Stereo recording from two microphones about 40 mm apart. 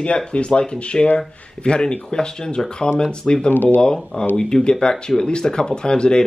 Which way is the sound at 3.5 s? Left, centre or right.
Left.